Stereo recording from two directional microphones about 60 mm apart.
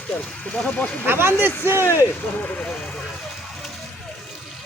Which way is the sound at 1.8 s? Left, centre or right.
Left.